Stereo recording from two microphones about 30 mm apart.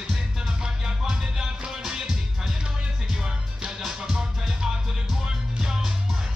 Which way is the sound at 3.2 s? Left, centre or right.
Right.